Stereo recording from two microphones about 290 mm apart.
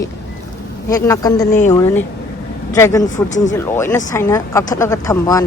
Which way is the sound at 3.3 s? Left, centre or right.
Left.